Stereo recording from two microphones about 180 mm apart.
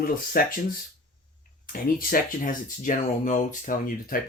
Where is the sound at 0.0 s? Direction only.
50° left (ahead or behind).